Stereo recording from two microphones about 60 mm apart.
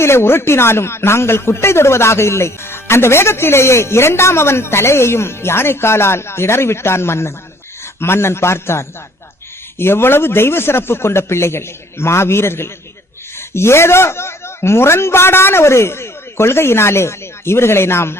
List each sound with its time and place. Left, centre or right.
0.0 s a man's voice: left